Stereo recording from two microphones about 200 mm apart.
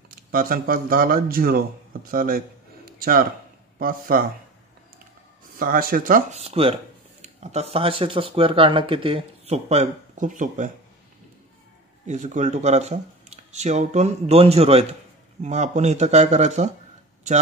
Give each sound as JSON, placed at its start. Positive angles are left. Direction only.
{"t": 0.1, "sound": "speech", "side_deg": -45}
{"t": 5.6, "sound": "speech", "side_deg": -45}
{"t": 6.4, "sound": "speech", "side_deg": -30}
{"t": 12.1, "sound": "speech", "side_deg": -35}